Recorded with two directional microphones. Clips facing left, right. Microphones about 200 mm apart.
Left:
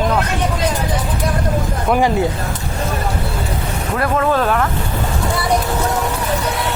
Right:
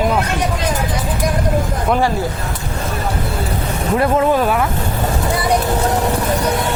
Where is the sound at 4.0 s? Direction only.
20° right (ahead or behind).